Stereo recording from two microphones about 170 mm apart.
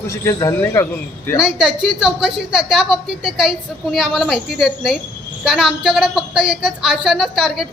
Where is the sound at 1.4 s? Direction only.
5° right (ahead or behind).